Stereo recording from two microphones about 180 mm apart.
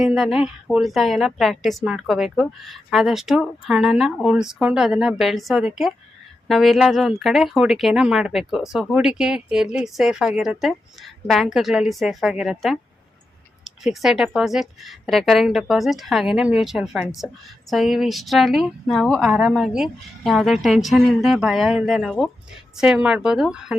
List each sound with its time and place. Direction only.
0.0 s a woman's voice: 5° right (ahead or behind)